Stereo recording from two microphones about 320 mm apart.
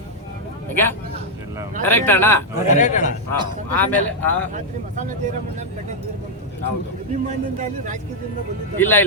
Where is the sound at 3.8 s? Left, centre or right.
Centre.